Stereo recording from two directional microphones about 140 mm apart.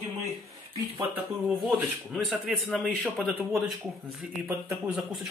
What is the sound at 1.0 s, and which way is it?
Speech, 10° right (ahead or behind).